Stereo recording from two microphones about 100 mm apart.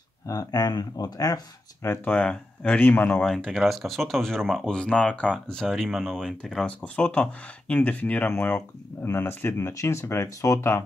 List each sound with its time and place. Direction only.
0.3 s speech: 40° left (ahead or behind)
2.0 s speech: 10° left (ahead or behind)
3.3 s speech: 5° left (ahead or behind); by 10.8 s 30° left (ahead or behind)